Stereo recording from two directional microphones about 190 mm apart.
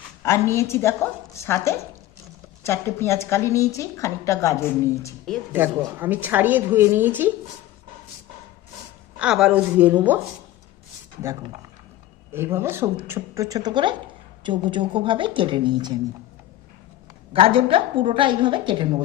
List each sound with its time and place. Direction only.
0.2 s a woman's voice: 15° left (ahead or behind)
5.5 s a woman's voice: 10° right (ahead or behind)
9.1 s a woman's voice: 5° right (ahead or behind)
12.3 s a woman's voice: 10° right (ahead or behind)
17.3 s a woman's voice: 30° right (ahead or behind)